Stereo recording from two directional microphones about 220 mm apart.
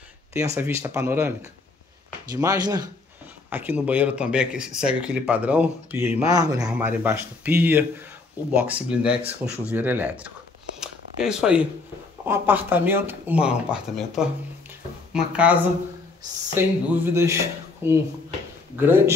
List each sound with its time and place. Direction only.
0.6 s speech: 10° right (ahead or behind)
10.8 s a sound: 5° right (ahead or behind)
12.3 s speech: 10° right (ahead or behind)